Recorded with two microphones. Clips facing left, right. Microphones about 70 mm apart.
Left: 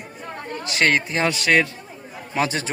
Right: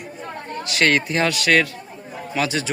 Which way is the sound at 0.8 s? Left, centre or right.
Centre.